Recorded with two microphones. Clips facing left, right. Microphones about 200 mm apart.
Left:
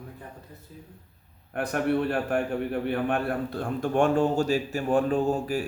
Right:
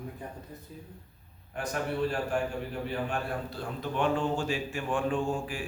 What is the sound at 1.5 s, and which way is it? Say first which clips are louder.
A man's voice: left 7 dB; 60° left (ahead or behind).